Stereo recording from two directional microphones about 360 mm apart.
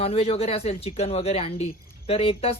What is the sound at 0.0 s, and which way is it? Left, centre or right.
Speech, centre.